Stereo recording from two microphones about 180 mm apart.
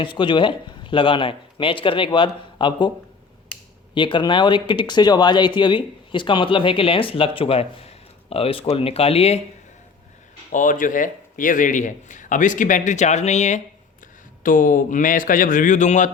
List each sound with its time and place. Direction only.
0.0 s speech: 25° left (ahead or behind)
3.9 s speech: 25° left (ahead or behind)
10.5 s a man's voice: 45° left (ahead or behind)